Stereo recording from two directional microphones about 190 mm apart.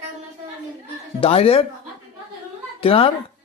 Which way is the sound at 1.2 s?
30° left (ahead or behind).